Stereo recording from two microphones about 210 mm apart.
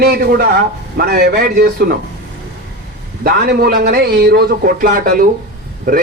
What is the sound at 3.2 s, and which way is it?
Speech, 45° right (ahead or behind).